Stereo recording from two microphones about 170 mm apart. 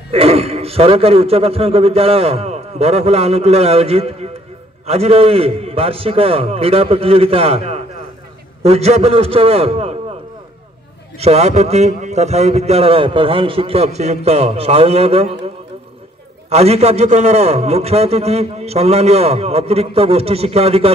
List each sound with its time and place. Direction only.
0.1 s a man's voice: 35° right (ahead or behind)
11.1 s a man's voice: 40° right (ahead or behind)